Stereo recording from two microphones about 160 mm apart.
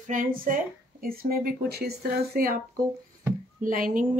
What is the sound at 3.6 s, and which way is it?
Speech, 55° right (ahead or behind).